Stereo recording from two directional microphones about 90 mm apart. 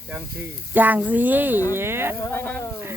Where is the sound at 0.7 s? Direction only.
20° right (ahead or behind).